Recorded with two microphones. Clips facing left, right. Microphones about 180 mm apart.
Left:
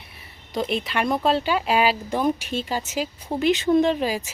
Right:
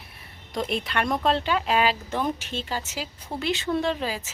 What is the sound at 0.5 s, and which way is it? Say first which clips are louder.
Speech: left 2 dB; centre (ahead or behind).